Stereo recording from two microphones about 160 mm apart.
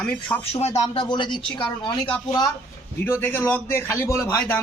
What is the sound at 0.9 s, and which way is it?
A man's voice, 30° left (ahead or behind).